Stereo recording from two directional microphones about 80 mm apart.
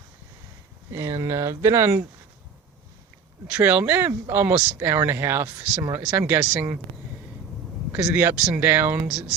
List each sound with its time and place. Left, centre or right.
0.9 s speech: right
3.4 s speech: right
8.1 s speech: right
9.0 s speech: centre